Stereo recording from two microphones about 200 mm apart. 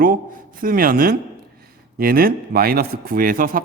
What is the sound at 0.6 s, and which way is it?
A man's voice, 45° right (ahead or behind).